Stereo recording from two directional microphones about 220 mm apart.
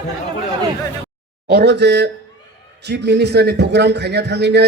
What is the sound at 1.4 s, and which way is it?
A man's voice, 50° right (ahead or behind).